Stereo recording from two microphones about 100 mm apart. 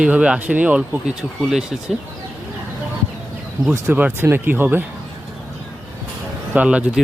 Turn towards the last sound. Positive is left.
turn(degrees=-10)  # may be behind; listen again after turning